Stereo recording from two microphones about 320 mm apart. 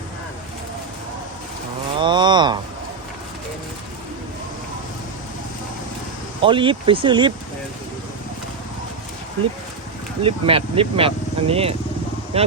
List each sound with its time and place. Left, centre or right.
2.0 s a sound: centre
6.4 s speech: centre
10.2 s speech: centre